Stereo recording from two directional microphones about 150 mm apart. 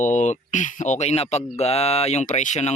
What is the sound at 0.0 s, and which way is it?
A man's voice, 55° left (ahead or behind).